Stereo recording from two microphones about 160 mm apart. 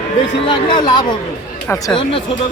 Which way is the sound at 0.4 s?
30° left (ahead or behind).